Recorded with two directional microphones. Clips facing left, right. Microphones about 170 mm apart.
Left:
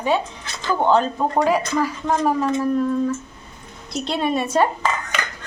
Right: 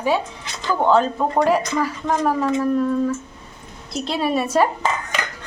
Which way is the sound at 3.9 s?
5° right (ahead or behind).